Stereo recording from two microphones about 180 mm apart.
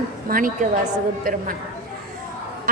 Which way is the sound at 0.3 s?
50° right (ahead or behind).